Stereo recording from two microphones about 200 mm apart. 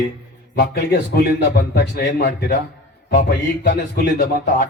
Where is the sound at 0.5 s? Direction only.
50° left (ahead or behind).